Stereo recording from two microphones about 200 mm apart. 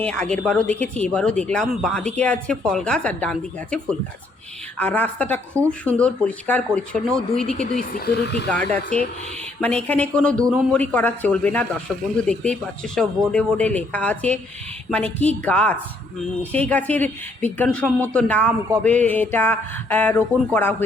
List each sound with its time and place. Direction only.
0.0 s speech: 5° left (ahead or behind)
7.8 s speech: 50° left (ahead or behind)
8.4 s speech: 5° left (ahead or behind)
10.4 s a man's voice: 10° right (ahead or behind)
10.7 s speech: 10° left (ahead or behind)